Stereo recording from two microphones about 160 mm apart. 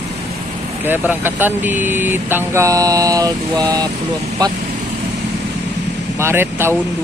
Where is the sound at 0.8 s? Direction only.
10° right (ahead or behind).